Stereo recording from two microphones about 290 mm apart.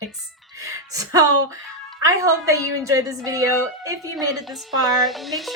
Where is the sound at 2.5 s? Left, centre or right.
Centre.